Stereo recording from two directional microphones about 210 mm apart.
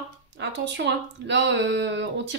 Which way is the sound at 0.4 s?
55° right (ahead or behind).